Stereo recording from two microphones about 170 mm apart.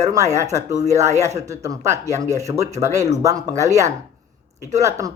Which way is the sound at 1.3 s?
20° right (ahead or behind).